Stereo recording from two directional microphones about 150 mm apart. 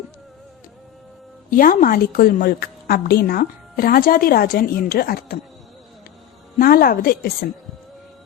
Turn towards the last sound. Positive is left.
turn(degrees=80)